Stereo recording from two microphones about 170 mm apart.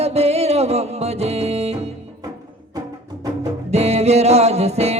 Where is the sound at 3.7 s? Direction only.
40° right (ahead or behind).